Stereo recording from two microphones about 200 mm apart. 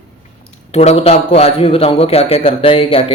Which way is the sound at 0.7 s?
30° left (ahead or behind).